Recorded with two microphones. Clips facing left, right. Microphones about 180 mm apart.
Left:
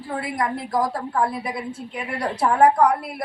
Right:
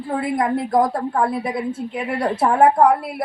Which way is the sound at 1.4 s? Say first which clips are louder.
Right 6 dB; 20° right (ahead or behind).